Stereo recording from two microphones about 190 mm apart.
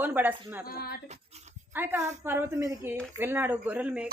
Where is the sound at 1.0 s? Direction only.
35° right (ahead or behind).